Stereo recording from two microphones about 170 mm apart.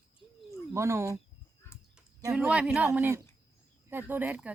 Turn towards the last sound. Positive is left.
turn(degrees=-10)  # may be behind; listen again after turning